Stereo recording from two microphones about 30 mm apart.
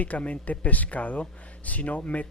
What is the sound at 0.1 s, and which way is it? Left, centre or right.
A woman's voice, left.